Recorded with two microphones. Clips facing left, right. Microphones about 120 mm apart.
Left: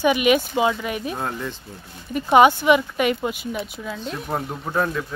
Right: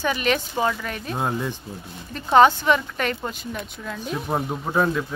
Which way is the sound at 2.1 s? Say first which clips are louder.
Left 1 dB; 10° left (ahead or behind).